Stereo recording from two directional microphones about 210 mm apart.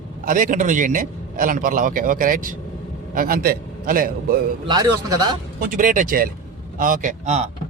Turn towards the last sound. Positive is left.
turn(degrees=-35)  # may be behind; listen again after turning